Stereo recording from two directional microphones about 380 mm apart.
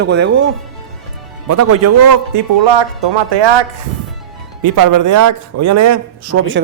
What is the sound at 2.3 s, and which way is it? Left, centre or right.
Speech, right.